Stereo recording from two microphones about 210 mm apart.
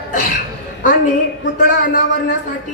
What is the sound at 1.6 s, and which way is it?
Speech, 40° left (ahead or behind).